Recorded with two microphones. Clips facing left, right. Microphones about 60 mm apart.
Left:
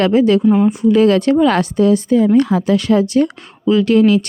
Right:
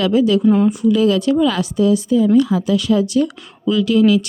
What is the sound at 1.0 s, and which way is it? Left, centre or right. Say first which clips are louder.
Speech: left 4 dB; left.